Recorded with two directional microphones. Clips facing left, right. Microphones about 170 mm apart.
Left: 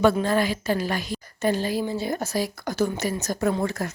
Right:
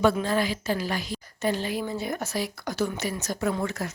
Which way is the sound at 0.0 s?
55° left (ahead or behind).